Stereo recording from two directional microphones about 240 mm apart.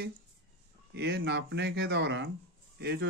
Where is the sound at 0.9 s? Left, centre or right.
Right.